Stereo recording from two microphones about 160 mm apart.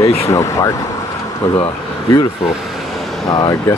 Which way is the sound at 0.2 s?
20° left (ahead or behind).